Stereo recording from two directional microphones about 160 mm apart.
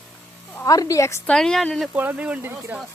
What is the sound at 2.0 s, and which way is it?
Speech, 10° right (ahead or behind).